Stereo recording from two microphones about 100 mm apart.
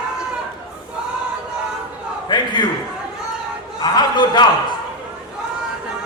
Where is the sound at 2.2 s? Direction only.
50° left (ahead or behind).